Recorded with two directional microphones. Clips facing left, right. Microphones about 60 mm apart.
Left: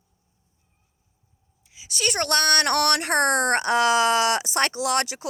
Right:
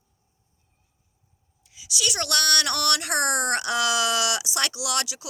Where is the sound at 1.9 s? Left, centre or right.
Left.